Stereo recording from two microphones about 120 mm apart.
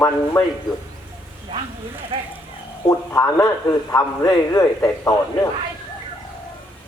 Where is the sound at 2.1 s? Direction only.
50° right (ahead or behind).